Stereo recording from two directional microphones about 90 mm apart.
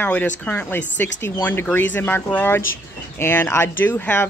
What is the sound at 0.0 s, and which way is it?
Speech, 15° left (ahead or behind).